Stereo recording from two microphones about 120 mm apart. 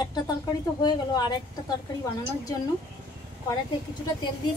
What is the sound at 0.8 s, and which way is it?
Speech, 35° left (ahead or behind).